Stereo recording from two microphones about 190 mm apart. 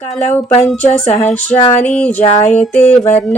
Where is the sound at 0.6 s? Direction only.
5° left (ahead or behind).